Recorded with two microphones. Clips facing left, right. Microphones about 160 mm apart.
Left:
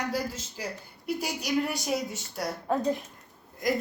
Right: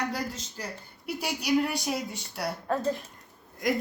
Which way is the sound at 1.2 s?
60° right (ahead or behind).